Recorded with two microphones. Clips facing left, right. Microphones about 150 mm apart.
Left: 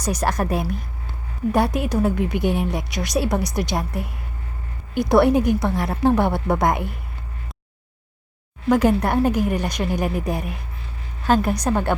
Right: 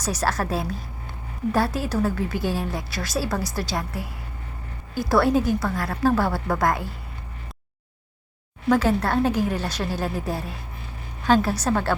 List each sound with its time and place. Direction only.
0.0 s a woman's voice: 10° left (ahead or behind)
1.5 s a woman's voice: 20° left (ahead or behind)
8.7 s a woman's voice: 10° left (ahead or behind)